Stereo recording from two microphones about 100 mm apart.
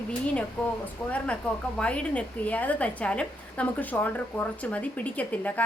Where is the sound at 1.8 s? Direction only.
10° left (ahead or behind).